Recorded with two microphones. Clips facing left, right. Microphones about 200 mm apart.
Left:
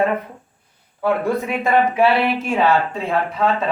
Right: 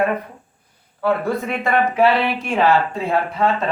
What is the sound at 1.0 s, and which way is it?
Speech, 15° left (ahead or behind).